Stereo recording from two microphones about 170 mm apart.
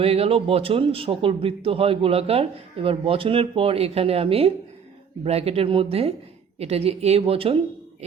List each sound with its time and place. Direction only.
0.0 s a man's voice: 35° right (ahead or behind)